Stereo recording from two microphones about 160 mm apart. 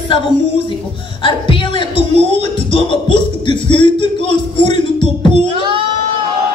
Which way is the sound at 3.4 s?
30° left (ahead or behind).